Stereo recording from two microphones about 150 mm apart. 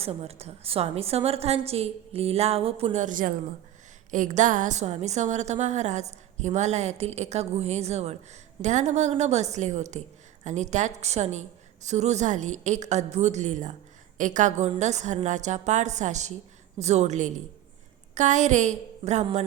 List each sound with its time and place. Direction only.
0.0 s a woman's voice: 40° right (ahead or behind)